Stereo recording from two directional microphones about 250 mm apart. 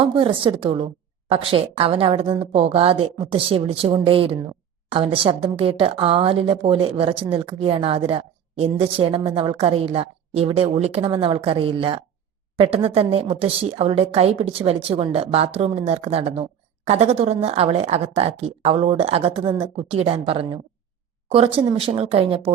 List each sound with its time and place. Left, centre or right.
0.0 s a woman's voice: right